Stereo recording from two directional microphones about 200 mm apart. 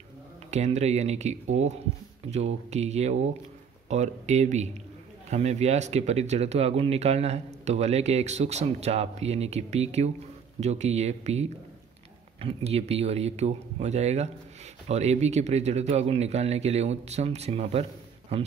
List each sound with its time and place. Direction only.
0.5 s speech: 35° right (ahead or behind)